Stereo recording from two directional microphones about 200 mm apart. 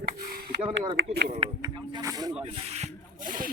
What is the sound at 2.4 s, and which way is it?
Rub, 30° right (ahead or behind).